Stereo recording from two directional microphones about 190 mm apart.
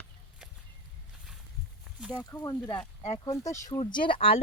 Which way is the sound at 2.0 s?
5° right (ahead or behind).